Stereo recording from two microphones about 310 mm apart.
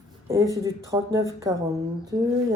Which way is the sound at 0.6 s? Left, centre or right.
Centre.